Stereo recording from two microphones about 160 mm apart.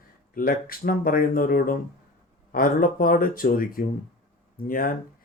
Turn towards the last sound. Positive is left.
turn(degrees=60)  # may be behind; listen again after turning